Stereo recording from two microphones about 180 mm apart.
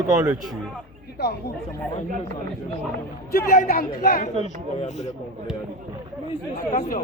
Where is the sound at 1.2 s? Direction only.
65° left (ahead or behind).